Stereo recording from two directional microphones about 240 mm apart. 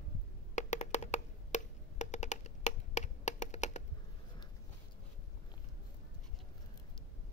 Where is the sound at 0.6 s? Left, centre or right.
Left.